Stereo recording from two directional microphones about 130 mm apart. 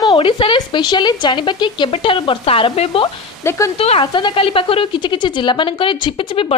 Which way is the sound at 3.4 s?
20° left (ahead or behind).